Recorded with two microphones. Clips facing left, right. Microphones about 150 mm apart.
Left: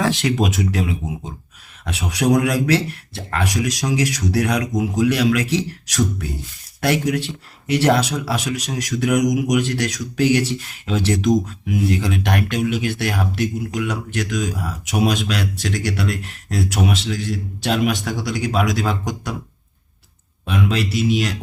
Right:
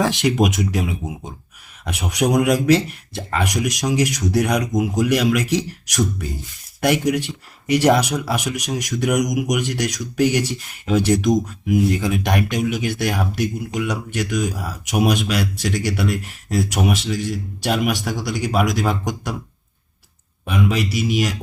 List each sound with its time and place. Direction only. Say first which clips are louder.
0.0 s speech: right 1 dB; 15° right (ahead or behind)
20.4 s speech: even; 10° right (ahead or behind)